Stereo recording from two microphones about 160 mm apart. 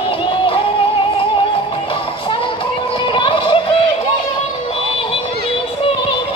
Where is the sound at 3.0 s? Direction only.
30° left (ahead or behind).